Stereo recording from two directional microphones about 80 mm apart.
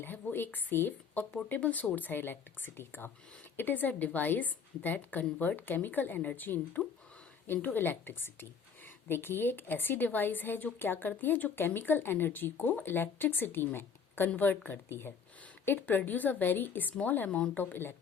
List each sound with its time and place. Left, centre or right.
0.0 s a woman's voice: left